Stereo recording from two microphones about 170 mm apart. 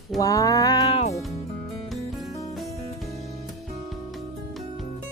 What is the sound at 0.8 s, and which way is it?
Music, 35° left (ahead or behind).